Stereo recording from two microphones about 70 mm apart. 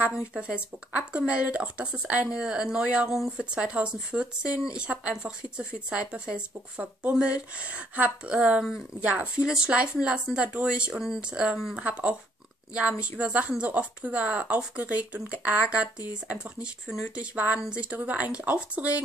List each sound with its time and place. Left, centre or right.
0.9 s speech: centre